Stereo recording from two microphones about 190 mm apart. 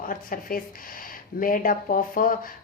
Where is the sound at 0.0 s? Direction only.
45° left (ahead or behind).